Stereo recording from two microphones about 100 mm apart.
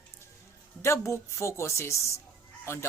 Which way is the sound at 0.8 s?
30° left (ahead or behind).